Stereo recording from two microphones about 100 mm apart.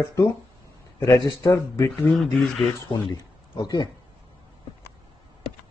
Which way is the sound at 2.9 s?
45° left (ahead or behind).